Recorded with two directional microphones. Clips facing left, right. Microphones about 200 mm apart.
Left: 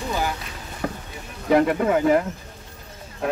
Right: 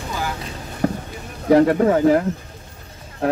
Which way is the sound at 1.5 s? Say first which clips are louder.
Right 4 dB; 35° right (ahead or behind).